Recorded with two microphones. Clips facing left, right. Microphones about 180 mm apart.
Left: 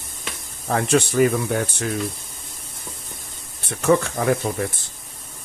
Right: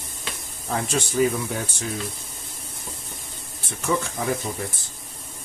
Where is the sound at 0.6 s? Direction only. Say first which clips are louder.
Left 7 dB; 65° left (ahead or behind).